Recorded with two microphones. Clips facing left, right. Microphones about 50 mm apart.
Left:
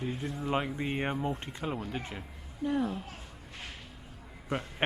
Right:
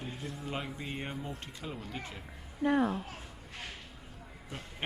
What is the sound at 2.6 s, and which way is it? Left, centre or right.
Speech, right.